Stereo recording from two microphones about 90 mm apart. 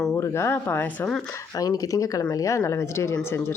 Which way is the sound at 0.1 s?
30° left (ahead or behind).